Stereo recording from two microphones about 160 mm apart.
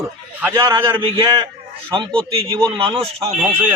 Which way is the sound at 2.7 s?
35° right (ahead or behind).